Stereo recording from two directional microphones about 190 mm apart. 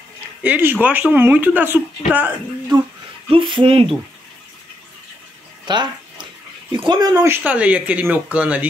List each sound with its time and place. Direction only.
0.4 s speech: 10° right (ahead or behind)
3.3 s speech: 25° right (ahead or behind)
5.7 s a sound: 25° right (ahead or behind)
6.7 s speech: 20° right (ahead or behind)
7.4 s speech: 5° right (ahead or behind)